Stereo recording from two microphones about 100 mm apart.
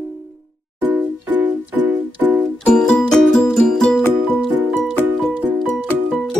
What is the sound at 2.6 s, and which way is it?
Music, 5° left (ahead or behind).